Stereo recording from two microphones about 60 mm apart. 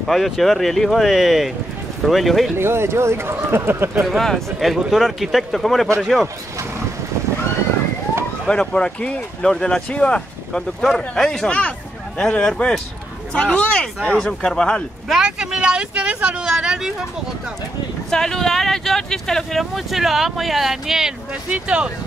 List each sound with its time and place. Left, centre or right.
0.0 s speech: centre
2.5 s speech: right
4.2 s speech: centre
8.5 s speech: centre
15.0 s speech: centre
18.1 s speech: centre
21.5 s speech: centre